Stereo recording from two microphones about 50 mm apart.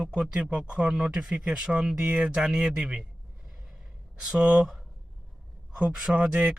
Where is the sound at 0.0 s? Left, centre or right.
Centre.